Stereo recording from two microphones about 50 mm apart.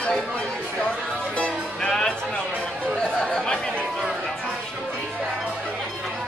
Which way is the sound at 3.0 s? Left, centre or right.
Centre.